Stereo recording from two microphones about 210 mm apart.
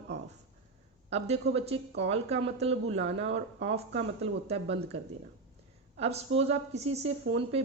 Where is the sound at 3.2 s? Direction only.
60° right (ahead or behind).